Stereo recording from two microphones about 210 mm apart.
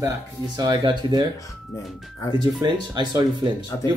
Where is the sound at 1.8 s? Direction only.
Centre (ahead or behind).